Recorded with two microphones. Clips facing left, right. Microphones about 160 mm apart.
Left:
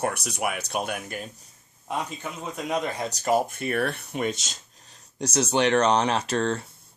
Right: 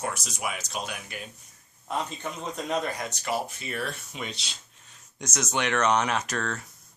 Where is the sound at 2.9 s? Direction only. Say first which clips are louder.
Left 3 dB; 30° left (ahead or behind).